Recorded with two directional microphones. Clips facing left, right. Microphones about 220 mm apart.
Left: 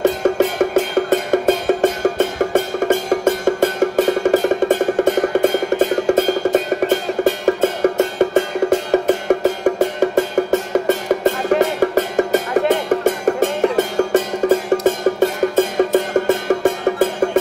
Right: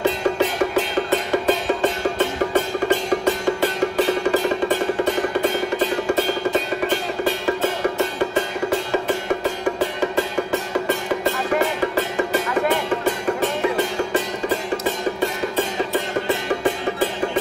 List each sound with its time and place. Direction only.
0.0 s music: 45° left (ahead or behind)